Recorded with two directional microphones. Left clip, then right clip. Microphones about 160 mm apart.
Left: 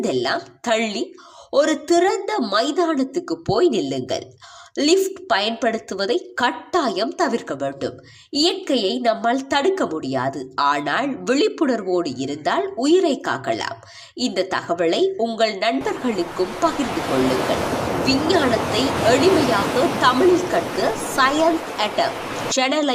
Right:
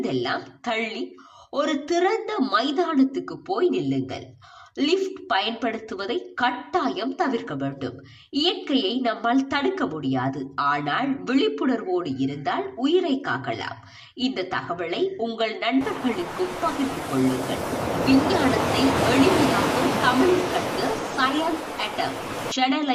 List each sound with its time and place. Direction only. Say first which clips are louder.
0.0 s a woman's voice: left 5 dB; 40° left (ahead or behind)
1.5 s a woman's voice: left 7 dB; 35° left (ahead or behind)
15.8 s a woman's voice: left 3 dB; centre (ahead or behind)
22.5 s a woman's voice: left 4 dB; 45° left (ahead or behind)